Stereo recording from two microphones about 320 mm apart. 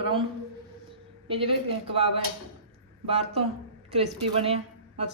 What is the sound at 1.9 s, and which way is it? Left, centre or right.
A man's voice, centre.